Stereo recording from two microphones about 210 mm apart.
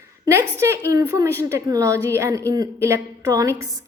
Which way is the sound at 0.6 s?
15° right (ahead or behind).